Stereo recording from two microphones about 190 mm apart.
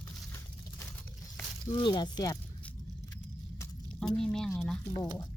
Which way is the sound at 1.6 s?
25° left (ahead or behind).